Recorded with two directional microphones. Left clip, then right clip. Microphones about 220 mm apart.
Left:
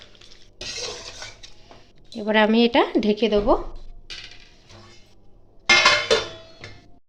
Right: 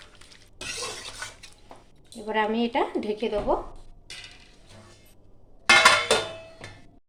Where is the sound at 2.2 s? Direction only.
45° left (ahead or behind).